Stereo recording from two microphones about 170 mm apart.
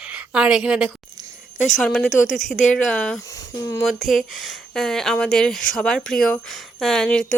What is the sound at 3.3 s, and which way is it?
Speech, 20° left (ahead or behind).